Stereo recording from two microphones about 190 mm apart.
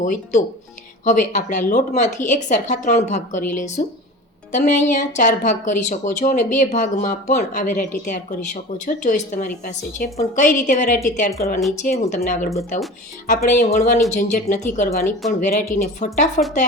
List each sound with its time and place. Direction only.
0.0 s speech: 40° left (ahead or behind)